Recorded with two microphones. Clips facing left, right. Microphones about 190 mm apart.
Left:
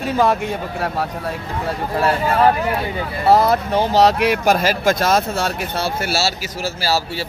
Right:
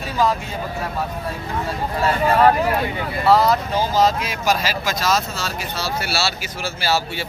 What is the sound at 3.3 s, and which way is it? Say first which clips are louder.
Speech: left 2 dB; 55° left (ahead or behind).